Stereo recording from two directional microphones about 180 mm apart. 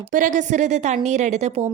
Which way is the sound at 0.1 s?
45° right (ahead or behind).